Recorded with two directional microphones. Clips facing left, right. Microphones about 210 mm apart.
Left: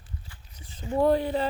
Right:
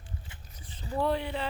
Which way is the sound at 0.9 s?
40° left (ahead or behind).